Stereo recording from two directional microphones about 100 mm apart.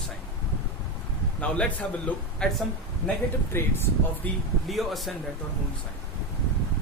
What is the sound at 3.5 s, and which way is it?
Speech, 25° left (ahead or behind).